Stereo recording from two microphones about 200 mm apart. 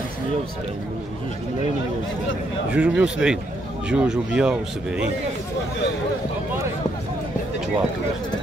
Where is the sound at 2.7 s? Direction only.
5° right (ahead or behind).